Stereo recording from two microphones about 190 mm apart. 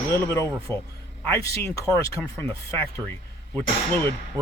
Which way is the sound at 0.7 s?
20° right (ahead or behind).